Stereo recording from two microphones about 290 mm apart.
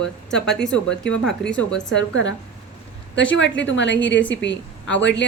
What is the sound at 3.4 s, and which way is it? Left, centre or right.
A woman's voice, left.